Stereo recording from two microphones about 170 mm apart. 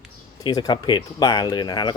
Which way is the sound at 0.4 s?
25° left (ahead or behind).